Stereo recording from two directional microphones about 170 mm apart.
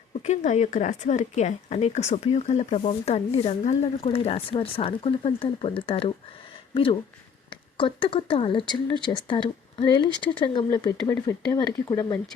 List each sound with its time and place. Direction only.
0.2 s speech: 40° left (ahead or behind)
7.5 s speech: 30° left (ahead or behind)